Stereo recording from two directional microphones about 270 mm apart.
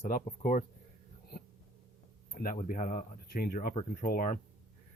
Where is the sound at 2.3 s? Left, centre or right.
Left.